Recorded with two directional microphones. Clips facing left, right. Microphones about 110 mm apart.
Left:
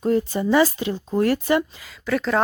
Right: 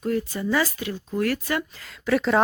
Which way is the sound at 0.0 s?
30° left (ahead or behind).